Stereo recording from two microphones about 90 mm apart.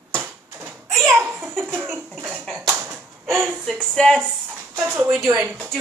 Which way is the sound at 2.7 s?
15° right (ahead or behind).